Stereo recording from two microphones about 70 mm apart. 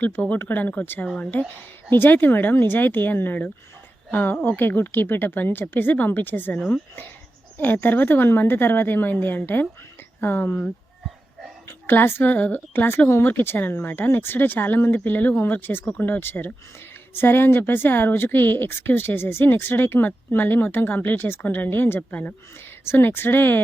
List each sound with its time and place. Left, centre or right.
0.0 s speech: left
7.6 s speech: left
11.9 s speech: left